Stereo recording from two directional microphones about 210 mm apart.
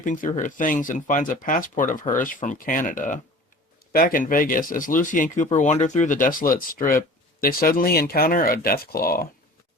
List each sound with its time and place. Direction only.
0.0 s speech: 40° left (ahead or behind)